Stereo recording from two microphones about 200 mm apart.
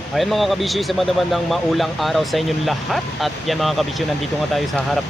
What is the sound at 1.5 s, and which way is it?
Speech, centre (ahead or behind).